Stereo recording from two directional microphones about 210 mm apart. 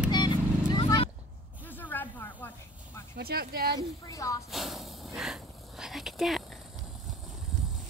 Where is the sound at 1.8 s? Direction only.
10° left (ahead or behind).